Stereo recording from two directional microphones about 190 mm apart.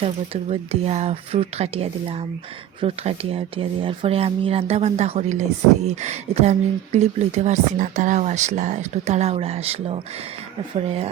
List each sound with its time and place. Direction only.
0.5 s speech: 30° right (ahead or behind)